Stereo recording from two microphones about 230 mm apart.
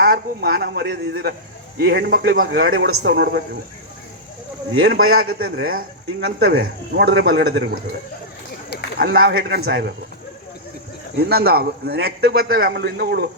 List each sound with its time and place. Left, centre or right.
0.0 s a man's voice: right
2.4 s speech: right
3.0 s a man's voice: right
4.9 s a man's voice: right
9.0 s a man's voice: right
11.2 s a man's voice: right